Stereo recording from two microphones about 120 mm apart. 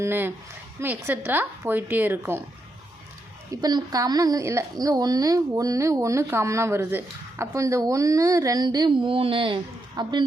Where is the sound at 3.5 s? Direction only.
35° right (ahead or behind).